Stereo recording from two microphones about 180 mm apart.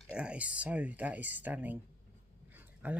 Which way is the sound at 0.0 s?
5° right (ahead or behind).